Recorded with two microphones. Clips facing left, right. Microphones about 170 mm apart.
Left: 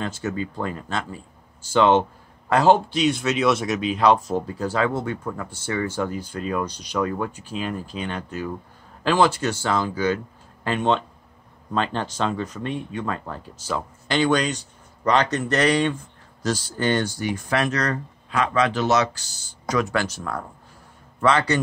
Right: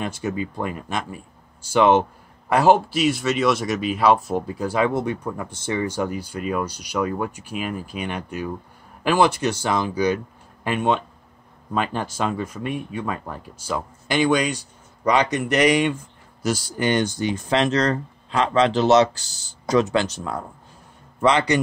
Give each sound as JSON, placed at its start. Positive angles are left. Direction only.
{"t": 0.0, "sound": "speech", "side_deg": -15}